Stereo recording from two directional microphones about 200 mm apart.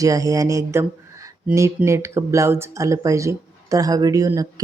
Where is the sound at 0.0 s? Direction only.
15° right (ahead or behind).